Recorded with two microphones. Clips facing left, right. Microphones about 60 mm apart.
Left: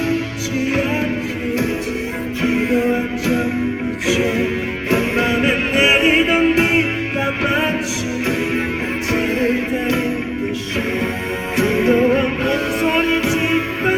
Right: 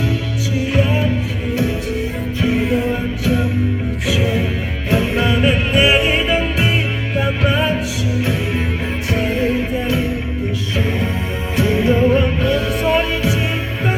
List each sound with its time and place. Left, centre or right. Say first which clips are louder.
2.4 s music: left 1 dB; left
5.3 s music: right 1 dB; left
5.9 s music: left 2 dB; left
6.2 s music: left 3 dB; left
11.5 s music: left 1 dB; left